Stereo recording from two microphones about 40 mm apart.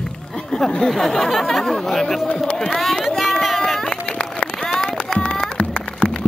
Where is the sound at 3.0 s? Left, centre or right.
Centre.